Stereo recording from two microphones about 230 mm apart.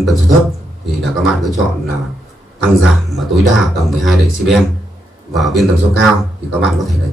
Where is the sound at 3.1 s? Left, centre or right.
Centre.